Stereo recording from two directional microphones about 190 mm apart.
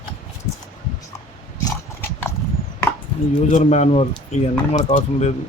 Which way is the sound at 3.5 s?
35° left (ahead or behind).